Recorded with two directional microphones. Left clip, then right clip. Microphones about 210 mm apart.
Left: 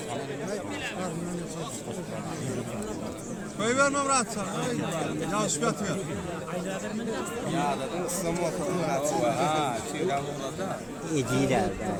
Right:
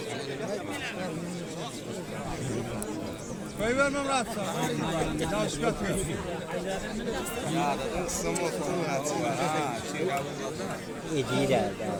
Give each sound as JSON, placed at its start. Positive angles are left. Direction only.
{"t": 3.6, "sound": "speech", "side_deg": 50}
{"t": 5.3, "sound": "speech", "side_deg": 55}
{"t": 8.8, "sound": "speech", "side_deg": 55}
{"t": 11.1, "sound": "speech", "side_deg": 35}